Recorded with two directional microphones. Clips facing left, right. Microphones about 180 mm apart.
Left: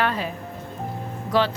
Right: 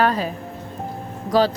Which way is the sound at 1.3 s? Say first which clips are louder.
Right 4 dB; 40° right (ahead or behind).